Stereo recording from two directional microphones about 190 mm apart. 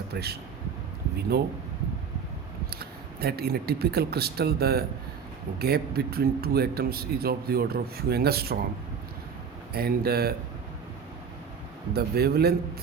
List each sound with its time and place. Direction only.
0.1 s a man's voice: 55° right (ahead or behind)
2.7 s a man's voice: 55° right (ahead or behind)
9.7 s speech: 55° right (ahead or behind)
11.9 s a man's voice: 55° right (ahead or behind)